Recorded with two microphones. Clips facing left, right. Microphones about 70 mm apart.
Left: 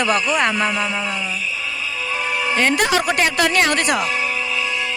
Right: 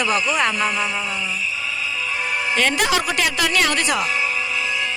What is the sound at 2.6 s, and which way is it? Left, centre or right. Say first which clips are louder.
Speech: left 2 dB; left.